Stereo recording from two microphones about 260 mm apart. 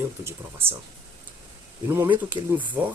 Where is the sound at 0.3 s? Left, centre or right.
Centre.